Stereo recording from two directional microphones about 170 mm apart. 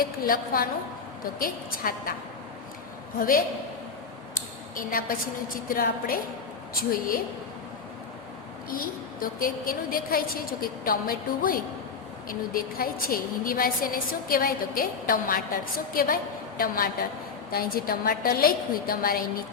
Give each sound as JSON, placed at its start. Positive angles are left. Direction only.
{"t": 0.0, "sound": "a woman's voice", "side_deg": 60}
{"t": 3.2, "sound": "a woman's voice", "side_deg": 55}
{"t": 4.4, "sound": "a sound", "side_deg": 55}
{"t": 5.6, "sound": "a woman's voice", "side_deg": 55}
{"t": 8.7, "sound": "a woman's voice", "side_deg": 55}